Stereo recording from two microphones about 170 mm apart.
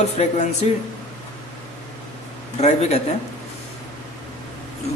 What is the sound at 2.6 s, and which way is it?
Speech, 40° left (ahead or behind).